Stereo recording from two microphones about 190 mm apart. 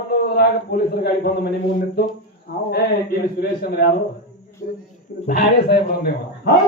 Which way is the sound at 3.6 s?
55° left (ahead or behind).